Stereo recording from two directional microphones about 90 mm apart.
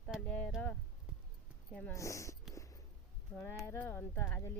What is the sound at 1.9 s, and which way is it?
Speech, 35° left (ahead or behind).